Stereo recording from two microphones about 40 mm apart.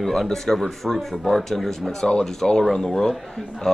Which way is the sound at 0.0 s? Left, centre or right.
Centre.